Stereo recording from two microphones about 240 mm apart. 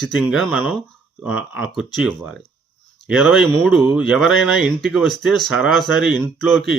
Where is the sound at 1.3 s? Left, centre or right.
Left.